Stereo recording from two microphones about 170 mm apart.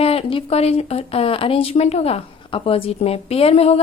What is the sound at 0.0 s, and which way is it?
A woman's voice, 35° left (ahead or behind).